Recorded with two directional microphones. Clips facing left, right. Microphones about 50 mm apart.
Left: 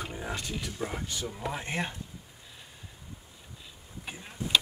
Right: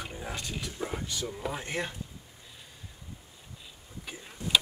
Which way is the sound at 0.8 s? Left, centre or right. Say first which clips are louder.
Right 1 dB; centre.